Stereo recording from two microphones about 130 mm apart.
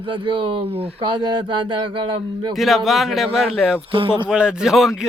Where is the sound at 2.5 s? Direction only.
Centre (ahead or behind).